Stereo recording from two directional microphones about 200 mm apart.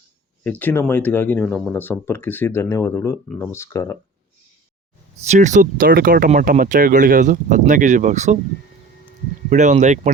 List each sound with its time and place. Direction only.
0.6 s speech: 10° left (ahead or behind)
5.2 s speech: 35° right (ahead or behind)
9.5 s speech: 35° right (ahead or behind)